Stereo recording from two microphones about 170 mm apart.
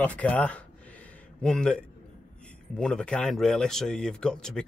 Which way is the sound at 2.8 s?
5° left (ahead or behind).